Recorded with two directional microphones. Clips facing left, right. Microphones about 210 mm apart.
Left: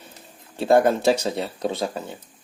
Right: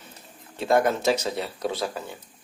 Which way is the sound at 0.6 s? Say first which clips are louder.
Left 4 dB; 30° left (ahead or behind).